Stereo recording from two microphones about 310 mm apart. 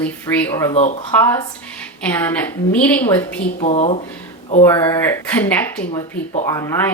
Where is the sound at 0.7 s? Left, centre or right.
Left.